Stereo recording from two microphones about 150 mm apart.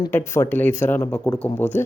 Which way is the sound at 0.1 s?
15° left (ahead or behind).